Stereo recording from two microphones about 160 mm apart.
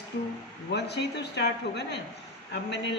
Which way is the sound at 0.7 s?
90° left.